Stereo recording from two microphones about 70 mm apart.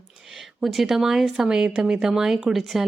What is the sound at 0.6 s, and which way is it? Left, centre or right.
A woman's voice, centre.